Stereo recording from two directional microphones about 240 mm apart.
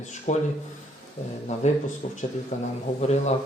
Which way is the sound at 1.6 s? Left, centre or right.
Left.